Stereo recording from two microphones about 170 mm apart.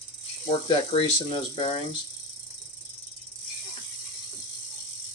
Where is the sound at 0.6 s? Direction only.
30° left (ahead or behind).